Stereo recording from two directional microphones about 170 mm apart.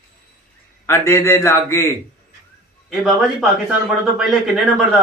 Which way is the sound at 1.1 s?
15° left (ahead or behind).